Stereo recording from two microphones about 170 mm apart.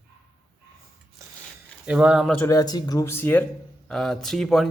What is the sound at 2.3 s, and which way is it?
A man's voice, 15° left (ahead or behind).